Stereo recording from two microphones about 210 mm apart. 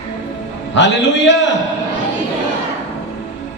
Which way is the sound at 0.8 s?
60° left (ahead or behind).